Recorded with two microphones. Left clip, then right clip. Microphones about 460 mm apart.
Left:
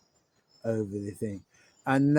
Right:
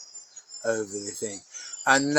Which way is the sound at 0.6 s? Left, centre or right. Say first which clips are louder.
Right 3 dB; left.